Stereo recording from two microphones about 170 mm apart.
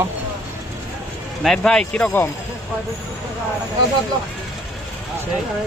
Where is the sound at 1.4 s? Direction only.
5° left (ahead or behind).